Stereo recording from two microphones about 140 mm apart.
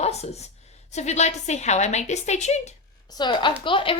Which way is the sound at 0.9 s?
55° left (ahead or behind).